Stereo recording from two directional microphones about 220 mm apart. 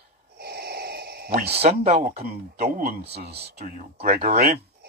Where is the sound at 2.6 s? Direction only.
45° right (ahead or behind).